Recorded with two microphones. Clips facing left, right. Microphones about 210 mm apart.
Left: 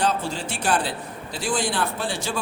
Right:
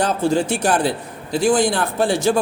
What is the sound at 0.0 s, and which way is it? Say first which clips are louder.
A man's voice: right 7 dB; 45° right (ahead or behind).